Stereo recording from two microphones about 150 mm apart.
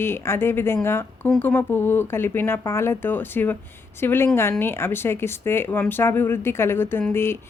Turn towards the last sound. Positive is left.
turn(degrees=15)  # may be behind; listen again after turning